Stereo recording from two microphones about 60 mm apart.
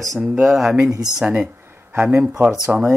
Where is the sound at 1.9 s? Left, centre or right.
Right.